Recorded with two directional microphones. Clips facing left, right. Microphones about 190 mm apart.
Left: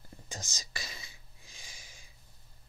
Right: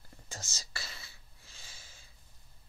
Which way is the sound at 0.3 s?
15° left (ahead or behind).